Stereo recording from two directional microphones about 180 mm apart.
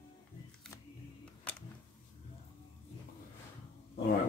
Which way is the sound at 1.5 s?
5° left (ahead or behind).